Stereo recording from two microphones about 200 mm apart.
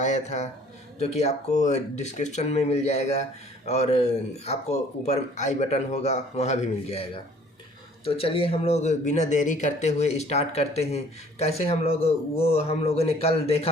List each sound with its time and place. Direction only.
0.0 s speech: 35° left (ahead or behind)